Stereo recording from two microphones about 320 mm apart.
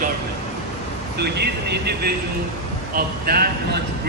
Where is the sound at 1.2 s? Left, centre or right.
Right.